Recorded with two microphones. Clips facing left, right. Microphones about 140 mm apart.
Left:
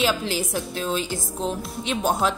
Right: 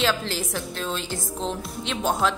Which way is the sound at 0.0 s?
10° left (ahead or behind).